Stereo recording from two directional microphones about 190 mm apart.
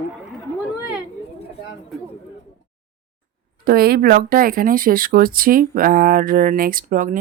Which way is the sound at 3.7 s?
55° right (ahead or behind).